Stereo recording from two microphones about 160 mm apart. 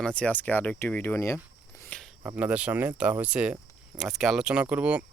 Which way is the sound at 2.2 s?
10° right (ahead or behind).